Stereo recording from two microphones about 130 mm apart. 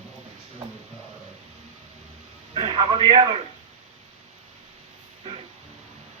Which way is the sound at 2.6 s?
40° right (ahead or behind).